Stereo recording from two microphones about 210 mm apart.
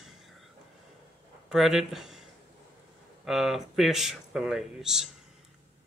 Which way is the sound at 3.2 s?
Centre (ahead or behind).